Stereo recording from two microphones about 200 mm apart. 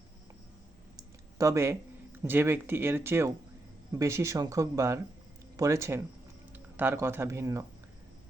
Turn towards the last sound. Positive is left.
turn(degrees=-15)  # may be behind; listen again after turning